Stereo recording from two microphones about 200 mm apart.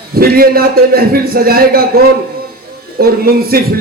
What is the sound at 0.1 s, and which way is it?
A man's voice, 50° right (ahead or behind).